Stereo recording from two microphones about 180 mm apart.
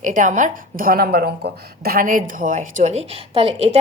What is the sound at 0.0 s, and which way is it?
A woman's voice, 45° right (ahead or behind).